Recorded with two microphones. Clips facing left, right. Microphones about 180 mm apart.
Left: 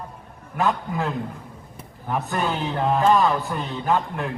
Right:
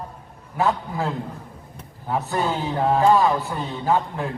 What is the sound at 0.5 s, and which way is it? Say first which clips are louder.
Speech: right 1 dB; 15° right (ahead or behind).